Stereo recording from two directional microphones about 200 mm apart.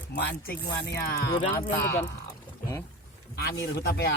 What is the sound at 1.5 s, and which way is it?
Speech, 10° left (ahead or behind).